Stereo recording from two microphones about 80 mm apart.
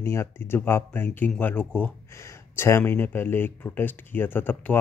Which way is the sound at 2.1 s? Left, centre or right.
Left.